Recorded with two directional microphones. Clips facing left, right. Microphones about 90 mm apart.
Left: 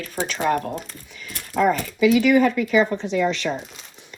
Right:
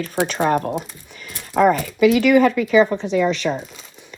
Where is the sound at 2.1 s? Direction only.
90° right.